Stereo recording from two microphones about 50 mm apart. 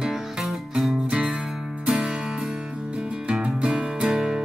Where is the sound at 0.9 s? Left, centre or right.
Centre.